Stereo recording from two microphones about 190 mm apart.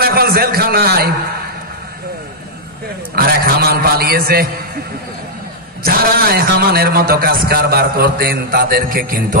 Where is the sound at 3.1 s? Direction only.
55° right (ahead or behind).